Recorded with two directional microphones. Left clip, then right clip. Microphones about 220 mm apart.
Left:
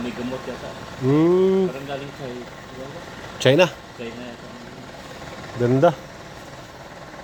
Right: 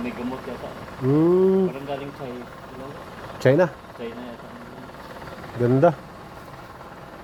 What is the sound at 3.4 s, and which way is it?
Speech, centre (ahead or behind).